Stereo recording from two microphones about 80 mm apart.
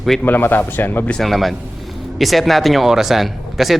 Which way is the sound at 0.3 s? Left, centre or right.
Left.